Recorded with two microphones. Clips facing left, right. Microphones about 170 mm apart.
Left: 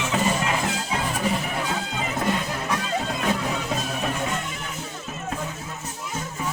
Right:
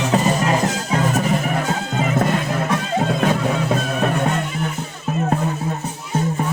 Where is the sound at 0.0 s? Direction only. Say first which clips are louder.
Right 6 dB; 40° right (ahead or behind); by 6.4 s 60° right (ahead or behind).